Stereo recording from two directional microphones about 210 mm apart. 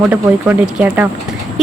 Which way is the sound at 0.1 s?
10° right (ahead or behind).